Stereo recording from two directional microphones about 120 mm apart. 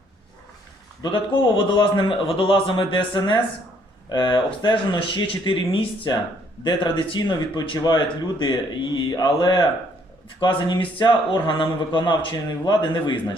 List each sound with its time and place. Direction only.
1.0 s a man's voice: 40° left (ahead or behind)